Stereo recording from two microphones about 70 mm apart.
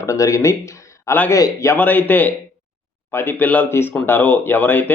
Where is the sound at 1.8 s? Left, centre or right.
Left.